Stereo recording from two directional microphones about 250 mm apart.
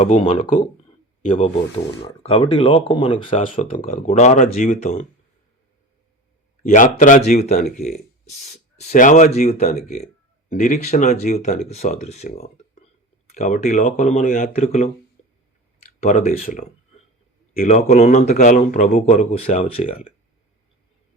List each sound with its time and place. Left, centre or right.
0.0 s speech: left
6.6 s speech: left